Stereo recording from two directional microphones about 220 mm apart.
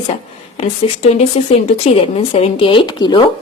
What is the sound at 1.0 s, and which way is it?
A woman's voice, 30° left (ahead or behind).